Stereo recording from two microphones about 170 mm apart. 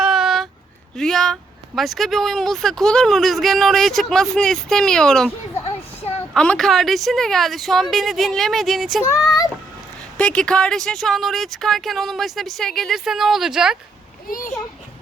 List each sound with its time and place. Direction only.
0.0 s a sound: 5° right (ahead or behind)
0.9 s speech: centre (ahead or behind)
6.3 s speech: 5° left (ahead or behind)
9.0 s a sound: 20° left (ahead or behind)
10.2 s speech: 5° left (ahead or behind)
14.3 s a child's voice: 55° left (ahead or behind)